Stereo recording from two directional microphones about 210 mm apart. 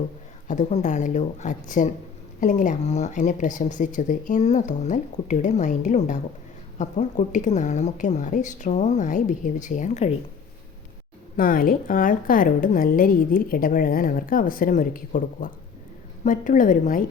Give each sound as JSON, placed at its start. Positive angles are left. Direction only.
{"t": 0.4, "sound": "a woman's voice", "side_deg": 35}
{"t": 11.3, "sound": "a woman's voice", "side_deg": 40}